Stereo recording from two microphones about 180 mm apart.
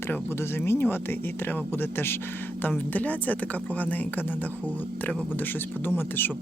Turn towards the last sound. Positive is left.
turn(degrees=10)  # may be behind; listen again after turning